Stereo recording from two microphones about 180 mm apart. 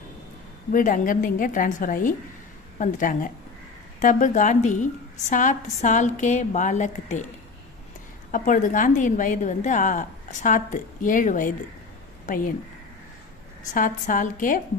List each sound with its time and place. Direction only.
0.7 s a woman's voice: 50° left (ahead or behind)
8.3 s a woman's voice: 45° left (ahead or behind)
13.7 s a woman's voice: 45° left (ahead or behind)